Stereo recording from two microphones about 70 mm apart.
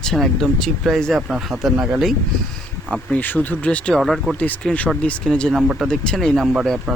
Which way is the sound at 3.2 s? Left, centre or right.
Left.